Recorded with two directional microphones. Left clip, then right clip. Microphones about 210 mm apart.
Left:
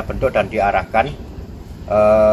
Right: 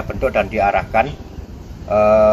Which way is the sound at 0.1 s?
10° left (ahead or behind).